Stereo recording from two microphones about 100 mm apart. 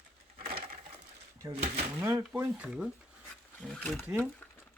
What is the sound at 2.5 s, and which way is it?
Speech, 10° right (ahead or behind).